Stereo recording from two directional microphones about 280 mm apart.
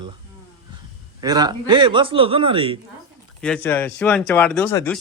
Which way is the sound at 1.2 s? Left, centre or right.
Centre.